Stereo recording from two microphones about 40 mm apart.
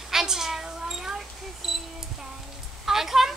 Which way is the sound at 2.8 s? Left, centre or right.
Centre.